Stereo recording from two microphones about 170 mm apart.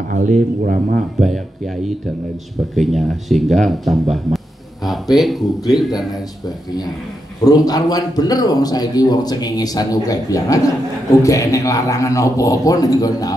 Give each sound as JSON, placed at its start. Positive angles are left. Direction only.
{"t": 0.1, "sound": "speech", "side_deg": -50}
{"t": 2.7, "sound": "speech", "side_deg": 0}
{"t": 7.4, "sound": "a man's voice", "side_deg": 20}